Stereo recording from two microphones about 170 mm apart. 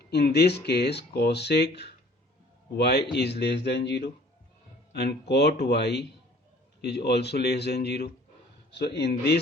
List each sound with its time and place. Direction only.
0.0 s speech: 70° left (ahead or behind)
8.7 s speech: 80° left